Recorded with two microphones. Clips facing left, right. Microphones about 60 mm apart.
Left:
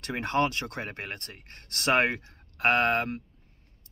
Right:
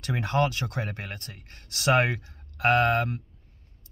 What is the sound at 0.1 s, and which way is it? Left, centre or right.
Speech, left.